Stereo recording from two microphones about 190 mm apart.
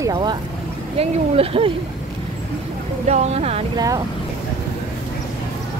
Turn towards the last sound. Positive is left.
turn(degrees=-20)  # may be behind; listen again after turning